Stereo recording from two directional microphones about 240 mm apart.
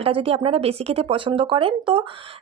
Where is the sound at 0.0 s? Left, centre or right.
Right.